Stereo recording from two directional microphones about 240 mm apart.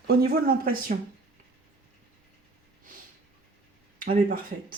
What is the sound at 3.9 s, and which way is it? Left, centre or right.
Speech, right.